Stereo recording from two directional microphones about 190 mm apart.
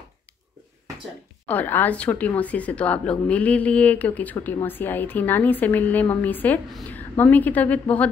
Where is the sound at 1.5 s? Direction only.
10° left (ahead or behind).